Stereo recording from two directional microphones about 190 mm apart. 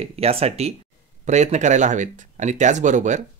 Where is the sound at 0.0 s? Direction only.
30° right (ahead or behind).